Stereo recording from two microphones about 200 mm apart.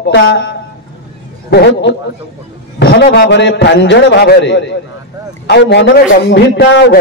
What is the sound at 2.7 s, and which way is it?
A man's voice, 55° left (ahead or behind).